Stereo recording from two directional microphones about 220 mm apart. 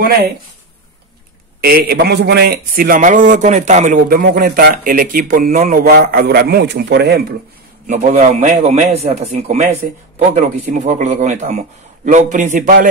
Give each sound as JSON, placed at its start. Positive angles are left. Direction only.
{"t": 1.6, "sound": "a man's voice", "side_deg": -45}
{"t": 7.8, "sound": "a man's voice", "side_deg": -35}